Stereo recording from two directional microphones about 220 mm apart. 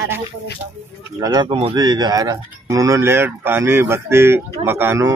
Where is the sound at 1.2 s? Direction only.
20° right (ahead or behind).